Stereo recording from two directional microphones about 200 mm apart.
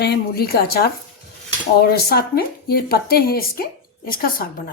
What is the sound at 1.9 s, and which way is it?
Speech, 50° left (ahead or behind).